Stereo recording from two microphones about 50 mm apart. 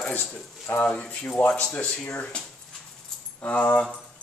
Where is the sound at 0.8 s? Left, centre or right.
Left.